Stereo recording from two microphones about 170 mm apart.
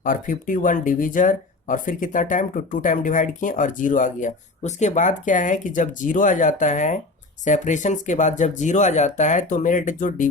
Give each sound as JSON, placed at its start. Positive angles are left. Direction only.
{"t": 0.0, "sound": "speech", "side_deg": 50}